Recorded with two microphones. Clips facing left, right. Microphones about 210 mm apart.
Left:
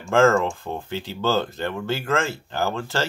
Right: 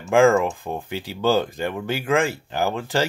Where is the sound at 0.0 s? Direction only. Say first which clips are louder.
Right 2 dB; 10° right (ahead or behind).